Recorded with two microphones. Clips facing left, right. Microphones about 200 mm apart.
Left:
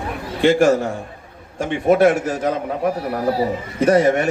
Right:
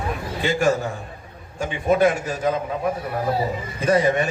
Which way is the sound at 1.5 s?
75° left (ahead or behind).